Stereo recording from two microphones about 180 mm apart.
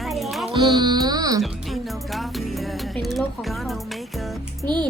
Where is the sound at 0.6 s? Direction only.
25° right (ahead or behind).